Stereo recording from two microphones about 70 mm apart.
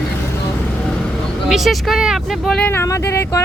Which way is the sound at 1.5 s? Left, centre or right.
Centre.